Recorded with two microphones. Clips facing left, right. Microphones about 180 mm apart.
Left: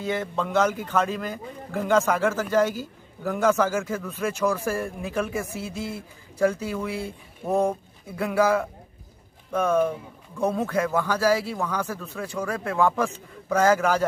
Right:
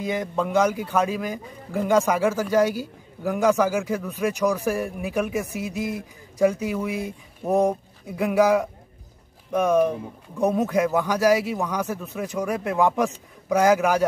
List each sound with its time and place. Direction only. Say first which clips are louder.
0.0 s a man's voice: right 2 dB; 15° right (ahead or behind)